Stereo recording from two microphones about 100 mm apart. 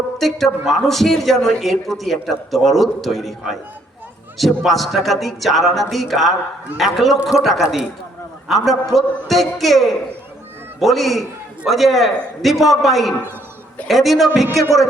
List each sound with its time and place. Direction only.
0.2 s a man's voice: 5° left (ahead or behind)